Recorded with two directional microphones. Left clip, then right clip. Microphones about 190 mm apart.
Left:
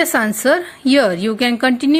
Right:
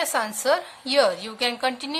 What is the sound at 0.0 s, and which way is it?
A woman's voice, 25° left (ahead or behind).